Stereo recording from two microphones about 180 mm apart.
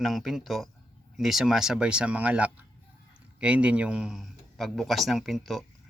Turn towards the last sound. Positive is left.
turn(degrees=0)  # may be behind; listen again after turning